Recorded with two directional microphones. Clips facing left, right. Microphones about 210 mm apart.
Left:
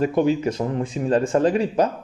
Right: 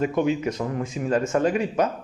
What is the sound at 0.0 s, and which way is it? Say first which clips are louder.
Speech: left 3 dB; 35° left (ahead or behind).